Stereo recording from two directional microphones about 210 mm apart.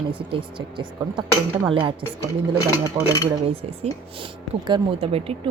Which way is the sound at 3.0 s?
15° right (ahead or behind).